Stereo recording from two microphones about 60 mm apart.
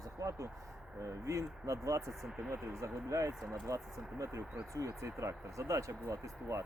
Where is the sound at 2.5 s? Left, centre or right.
Right.